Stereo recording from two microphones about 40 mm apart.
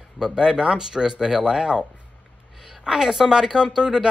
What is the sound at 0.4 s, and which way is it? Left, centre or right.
Speech, centre.